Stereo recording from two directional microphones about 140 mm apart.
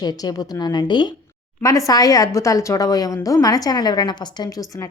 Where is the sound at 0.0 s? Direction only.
30° left (ahead or behind).